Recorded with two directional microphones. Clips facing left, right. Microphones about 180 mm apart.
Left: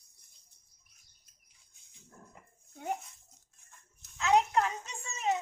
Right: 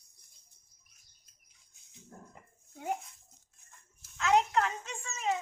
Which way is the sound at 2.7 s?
Centre (ahead or behind).